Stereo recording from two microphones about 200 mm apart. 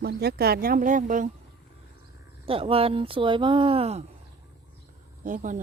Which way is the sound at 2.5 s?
25° right (ahead or behind).